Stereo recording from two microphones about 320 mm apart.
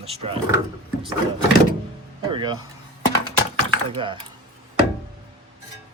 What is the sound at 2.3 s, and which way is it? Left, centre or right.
Speech, centre.